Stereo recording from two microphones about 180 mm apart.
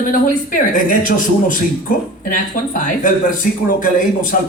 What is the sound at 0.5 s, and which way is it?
Speech, 50° left (ahead or behind).